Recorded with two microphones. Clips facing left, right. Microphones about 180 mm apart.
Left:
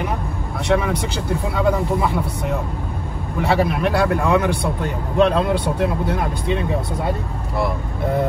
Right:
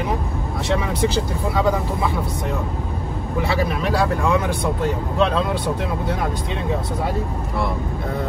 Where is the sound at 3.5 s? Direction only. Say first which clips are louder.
Left 5 dB; 60° left (ahead or behind).